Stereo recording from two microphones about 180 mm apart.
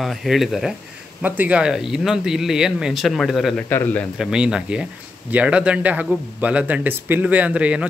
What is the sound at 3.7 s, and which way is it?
Speech, 10° left (ahead or behind).